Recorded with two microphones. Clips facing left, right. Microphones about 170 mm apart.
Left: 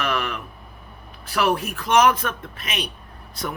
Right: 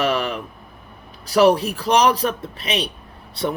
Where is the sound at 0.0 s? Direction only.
35° right (ahead or behind).